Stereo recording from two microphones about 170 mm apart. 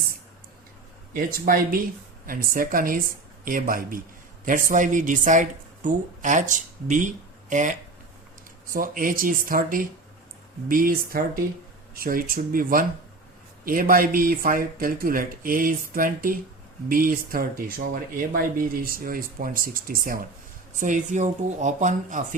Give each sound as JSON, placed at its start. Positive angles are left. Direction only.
{"t": 1.1, "sound": "speech", "side_deg": -55}